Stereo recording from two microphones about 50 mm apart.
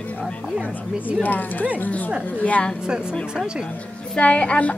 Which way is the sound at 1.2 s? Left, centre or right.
Left.